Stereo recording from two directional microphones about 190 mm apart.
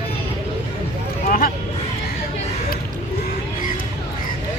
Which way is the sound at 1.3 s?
50° left (ahead or behind).